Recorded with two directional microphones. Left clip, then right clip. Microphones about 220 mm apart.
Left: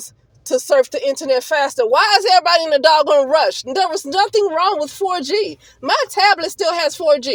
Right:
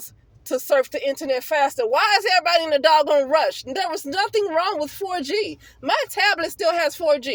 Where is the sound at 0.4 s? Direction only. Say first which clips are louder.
Left 5 dB; 20° left (ahead or behind).